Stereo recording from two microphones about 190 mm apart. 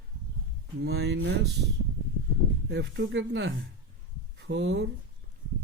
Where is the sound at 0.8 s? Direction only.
60° right (ahead or behind).